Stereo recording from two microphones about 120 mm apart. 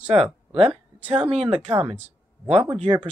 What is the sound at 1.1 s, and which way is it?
Speech, 50° right (ahead or behind).